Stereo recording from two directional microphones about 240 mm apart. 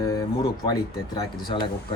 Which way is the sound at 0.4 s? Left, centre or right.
Centre.